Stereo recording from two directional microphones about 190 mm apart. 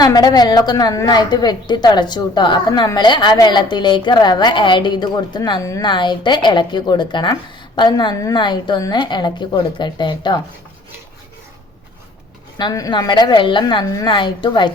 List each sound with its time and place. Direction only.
0.0 s a woman's voice: 20° left (ahead or behind)
12.5 s a woman's voice: 20° left (ahead or behind)